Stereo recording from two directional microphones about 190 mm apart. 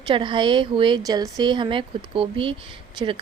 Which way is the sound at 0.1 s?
25° right (ahead or behind).